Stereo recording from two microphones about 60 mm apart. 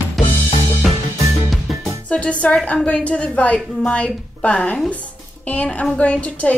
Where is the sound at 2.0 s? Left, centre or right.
Left.